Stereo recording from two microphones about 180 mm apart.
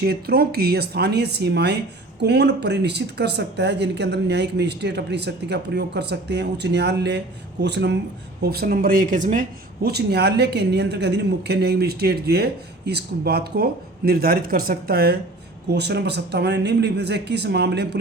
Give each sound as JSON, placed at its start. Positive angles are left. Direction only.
{"t": 0.0, "sound": "speech", "side_deg": -60}
{"t": 8.4, "sound": "speech", "side_deg": -60}